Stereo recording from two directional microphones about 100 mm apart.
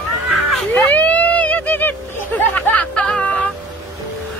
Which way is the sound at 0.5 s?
5° left (ahead or behind).